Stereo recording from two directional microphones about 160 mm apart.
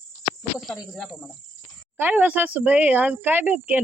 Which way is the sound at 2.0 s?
10° right (ahead or behind).